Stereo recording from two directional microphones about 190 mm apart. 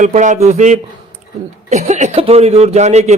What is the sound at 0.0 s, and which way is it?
Speech, 40° right (ahead or behind).